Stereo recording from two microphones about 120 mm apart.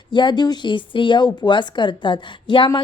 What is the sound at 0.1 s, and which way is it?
Speech, 40° left (ahead or behind).